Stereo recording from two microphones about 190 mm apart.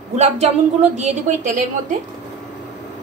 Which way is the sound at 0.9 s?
40° right (ahead or behind).